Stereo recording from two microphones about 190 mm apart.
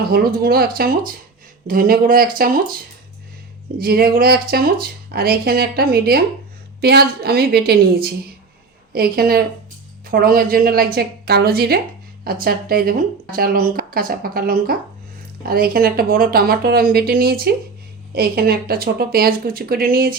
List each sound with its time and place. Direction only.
0.1 s a woman's voice: 50° right (ahead or behind)
3.8 s a woman's voice: 55° right (ahead or behind)